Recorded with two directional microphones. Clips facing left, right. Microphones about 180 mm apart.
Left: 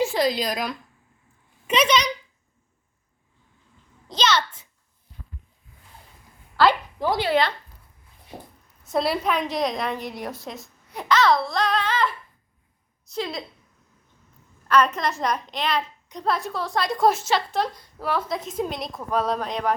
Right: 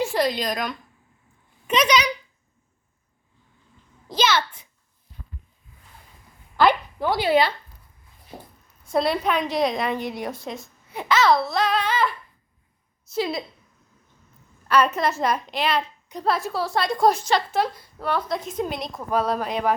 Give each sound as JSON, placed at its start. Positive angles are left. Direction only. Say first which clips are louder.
{"t": 0.0, "sound": "a woman's voice", "louder": "left 1 dB", "side_deg": 0}
{"t": 4.1, "sound": "a child's voice", "louder": "right 1 dB", "side_deg": -10}
{"t": 6.6, "sound": "a child's voice", "louder": "even", "side_deg": -20}
{"t": 8.9, "sound": "a woman's voice", "louder": "right 1 dB", "side_deg": 0}
{"t": 13.1, "sound": "a woman's voice", "louder": "right 4 dB", "side_deg": -5}
{"t": 14.7, "sound": "a woman's voice", "louder": "right 1 dB", "side_deg": -5}